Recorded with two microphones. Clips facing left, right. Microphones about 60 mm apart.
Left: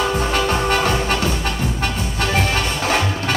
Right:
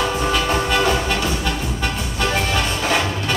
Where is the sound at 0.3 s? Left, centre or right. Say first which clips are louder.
Left 1 dB; left.